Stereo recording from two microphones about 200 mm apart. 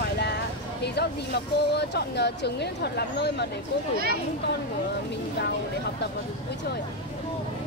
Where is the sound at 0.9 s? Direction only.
55° left (ahead or behind).